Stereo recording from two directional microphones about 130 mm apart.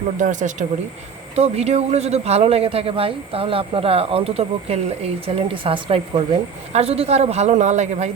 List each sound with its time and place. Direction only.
0.2 s speech: 75° right (ahead or behind)
1.4 s a man's voice: 55° right (ahead or behind)